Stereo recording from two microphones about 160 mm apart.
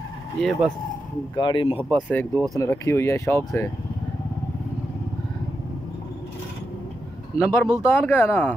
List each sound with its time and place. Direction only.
0.4 s speech: centre (ahead or behind)
1.3 s speech: 30° left (ahead or behind)
1.8 s speech: 10° left (ahead or behind)
2.3 s speech: 20° right (ahead or behind)
2.6 s speech: 20° left (ahead or behind)
7.3 s speech: 15° left (ahead or behind)